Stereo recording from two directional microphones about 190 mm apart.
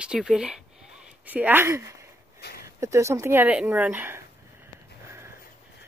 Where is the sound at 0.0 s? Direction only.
5° right (ahead or behind).